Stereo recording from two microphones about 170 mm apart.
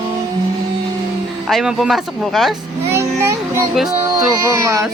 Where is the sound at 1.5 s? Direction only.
Centre (ahead or behind).